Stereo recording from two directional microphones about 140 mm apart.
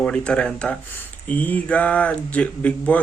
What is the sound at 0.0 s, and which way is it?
Speech, 5° left (ahead or behind).